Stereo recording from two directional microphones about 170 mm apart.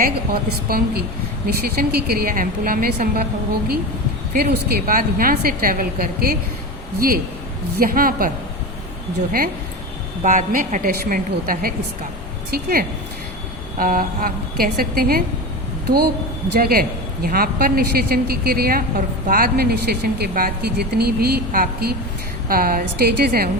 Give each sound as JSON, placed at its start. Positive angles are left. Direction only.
{"t": 0.0, "sound": "a woman's voice", "side_deg": -60}
{"t": 4.4, "sound": "a woman's voice", "side_deg": -65}
{"t": 7.8, "sound": "a woman's voice", "side_deg": -60}
{"t": 10.2, "sound": "a woman's voice", "side_deg": -50}
{"t": 13.7, "sound": "a woman's voice", "side_deg": -55}
{"t": 16.5, "sound": "a woman's voice", "side_deg": -60}